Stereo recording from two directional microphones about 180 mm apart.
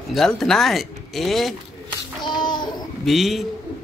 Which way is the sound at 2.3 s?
25° left (ahead or behind).